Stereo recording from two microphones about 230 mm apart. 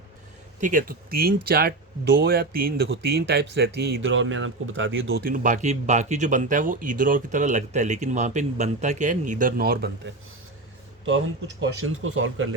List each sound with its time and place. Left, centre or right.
0.6 s speech: right
5.2 s speech: right
11.6 s speech: right